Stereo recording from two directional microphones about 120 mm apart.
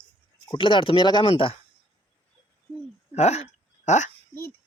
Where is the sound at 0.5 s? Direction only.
45° left (ahead or behind).